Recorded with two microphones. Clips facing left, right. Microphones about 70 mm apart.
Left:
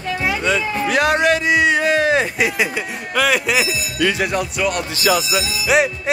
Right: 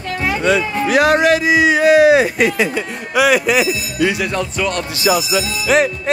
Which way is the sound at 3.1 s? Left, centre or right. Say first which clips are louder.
Right 4 dB; centre.